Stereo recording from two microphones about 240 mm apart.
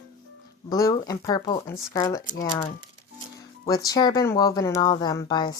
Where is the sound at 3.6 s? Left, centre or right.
Centre.